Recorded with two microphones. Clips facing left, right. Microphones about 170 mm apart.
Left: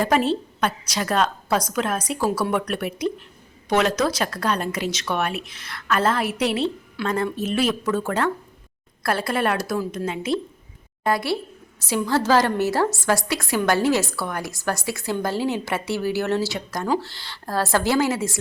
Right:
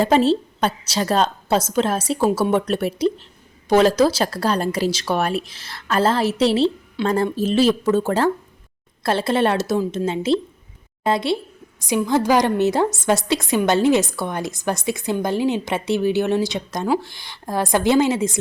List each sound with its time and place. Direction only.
0.0 s a woman's voice: 30° right (ahead or behind)